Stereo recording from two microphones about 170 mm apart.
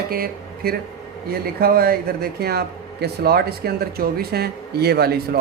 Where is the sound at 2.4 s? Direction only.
70° right (ahead or behind).